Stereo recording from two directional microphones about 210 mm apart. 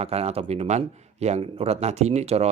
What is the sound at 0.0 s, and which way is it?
Speech, 30° right (ahead or behind).